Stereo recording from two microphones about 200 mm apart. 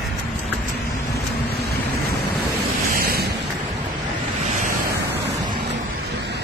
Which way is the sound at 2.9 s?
50° right (ahead or behind).